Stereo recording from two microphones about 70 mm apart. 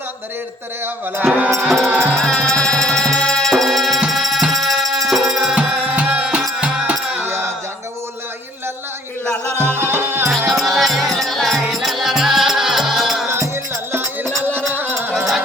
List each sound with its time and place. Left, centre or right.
1.2 s music: centre
1.6 s music: centre
1.9 s music: right
2.1 s music: centre
7.2 s a sound: right
9.6 s music: right
10.5 s music: centre
13.2 s music: right